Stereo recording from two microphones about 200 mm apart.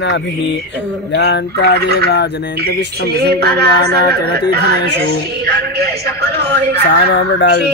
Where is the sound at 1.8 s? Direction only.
55° right (ahead or behind).